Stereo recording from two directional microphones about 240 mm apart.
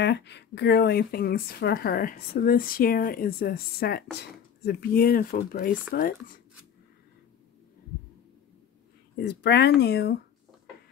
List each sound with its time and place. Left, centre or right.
0.0 s speech: left
9.2 s speech: left